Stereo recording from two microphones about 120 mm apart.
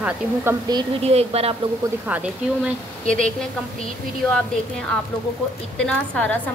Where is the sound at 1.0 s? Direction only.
55° right (ahead or behind).